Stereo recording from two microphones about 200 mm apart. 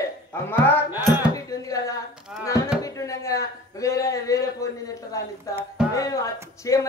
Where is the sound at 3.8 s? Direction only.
15° left (ahead or behind).